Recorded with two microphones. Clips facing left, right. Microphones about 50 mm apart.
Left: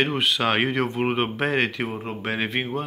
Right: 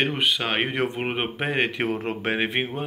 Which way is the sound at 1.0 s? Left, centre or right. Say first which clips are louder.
Left 3 dB; centre.